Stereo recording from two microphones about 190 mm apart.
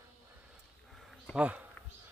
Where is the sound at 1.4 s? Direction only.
5° right (ahead or behind).